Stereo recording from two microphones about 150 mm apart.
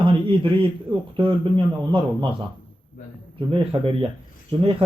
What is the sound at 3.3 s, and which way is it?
Speech, 35° right (ahead or behind).